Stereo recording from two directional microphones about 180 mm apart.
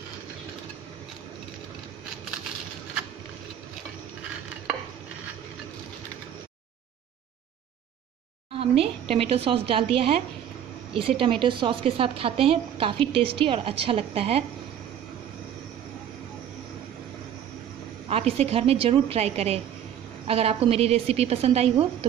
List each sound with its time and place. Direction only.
8.5 s a woman's voice: 30° right (ahead or behind)
18.0 s a woman's voice: 35° right (ahead or behind)